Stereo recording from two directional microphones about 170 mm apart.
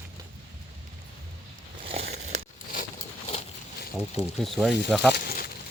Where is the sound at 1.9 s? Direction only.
35° right (ahead or behind).